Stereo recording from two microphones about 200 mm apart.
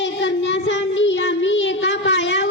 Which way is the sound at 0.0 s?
65° left (ahead or behind).